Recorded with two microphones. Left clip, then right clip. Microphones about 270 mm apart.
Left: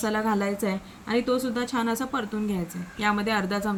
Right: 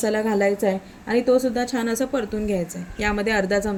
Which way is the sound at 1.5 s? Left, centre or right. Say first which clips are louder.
Right 4 dB; centre.